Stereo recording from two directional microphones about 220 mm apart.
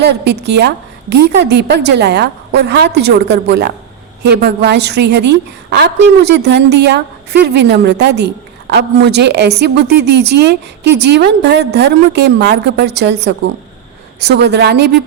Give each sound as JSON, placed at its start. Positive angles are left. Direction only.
{"t": 0.0, "sound": "a woman's voice", "side_deg": -50}